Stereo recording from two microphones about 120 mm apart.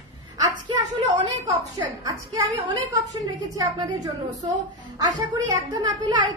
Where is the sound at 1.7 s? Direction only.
30° right (ahead or behind).